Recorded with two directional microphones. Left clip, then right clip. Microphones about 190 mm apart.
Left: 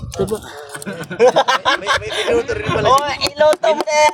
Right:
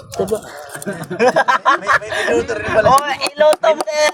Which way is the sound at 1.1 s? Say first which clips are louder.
Left 1 dB; 25° left (ahead or behind).